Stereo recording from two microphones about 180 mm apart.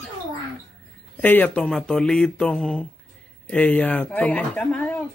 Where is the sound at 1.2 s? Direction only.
10° left (ahead or behind).